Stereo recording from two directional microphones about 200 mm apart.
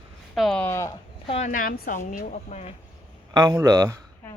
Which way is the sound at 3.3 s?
20° right (ahead or behind).